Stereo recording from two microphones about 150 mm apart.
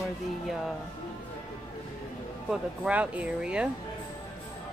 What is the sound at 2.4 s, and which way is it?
Speech, 10° right (ahead or behind).